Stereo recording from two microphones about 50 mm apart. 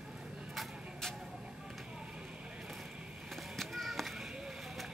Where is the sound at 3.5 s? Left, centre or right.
Centre.